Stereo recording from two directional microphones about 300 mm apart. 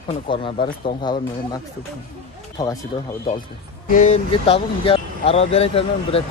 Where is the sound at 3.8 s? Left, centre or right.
Left.